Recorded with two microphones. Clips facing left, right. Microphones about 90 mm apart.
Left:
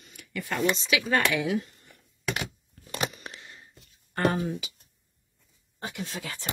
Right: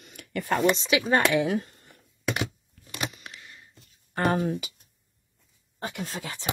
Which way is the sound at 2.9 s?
35° left (ahead or behind).